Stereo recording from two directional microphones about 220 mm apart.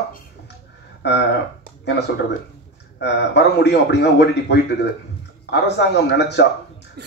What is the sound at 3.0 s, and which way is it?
Speech, 50° left (ahead or behind).